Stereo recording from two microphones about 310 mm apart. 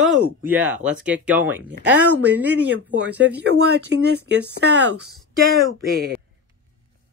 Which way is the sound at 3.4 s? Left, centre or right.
Right.